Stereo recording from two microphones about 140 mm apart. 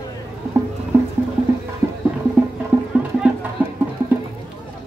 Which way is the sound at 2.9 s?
10° right (ahead or behind).